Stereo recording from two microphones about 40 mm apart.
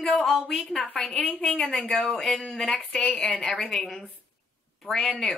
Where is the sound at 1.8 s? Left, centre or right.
Left.